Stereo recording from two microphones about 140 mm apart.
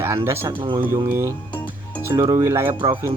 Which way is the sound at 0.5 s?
35° right (ahead or behind).